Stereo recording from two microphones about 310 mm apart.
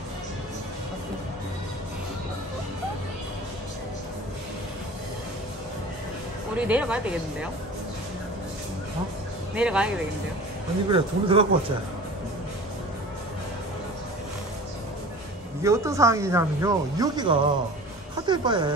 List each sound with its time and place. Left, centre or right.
6.5 s speech: centre
9.6 s speech: centre
10.9 s speech: centre
15.6 s speech: centre